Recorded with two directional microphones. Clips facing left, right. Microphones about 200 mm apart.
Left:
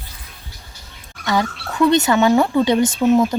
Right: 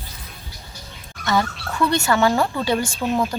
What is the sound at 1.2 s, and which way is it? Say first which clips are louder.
Speech: left 1 dB; 15° left (ahead or behind).